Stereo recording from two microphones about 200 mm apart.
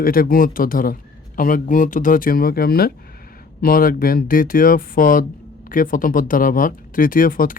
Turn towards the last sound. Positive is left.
turn(degrees=45)  # may be behind; listen again after turning